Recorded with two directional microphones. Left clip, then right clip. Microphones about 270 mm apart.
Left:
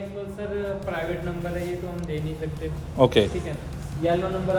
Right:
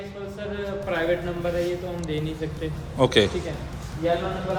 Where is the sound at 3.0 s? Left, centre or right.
Centre.